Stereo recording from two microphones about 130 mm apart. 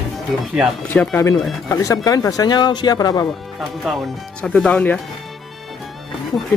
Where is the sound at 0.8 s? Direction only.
20° left (ahead or behind).